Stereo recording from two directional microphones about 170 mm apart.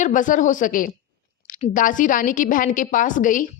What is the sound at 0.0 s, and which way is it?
A woman's voice, 50° left (ahead or behind).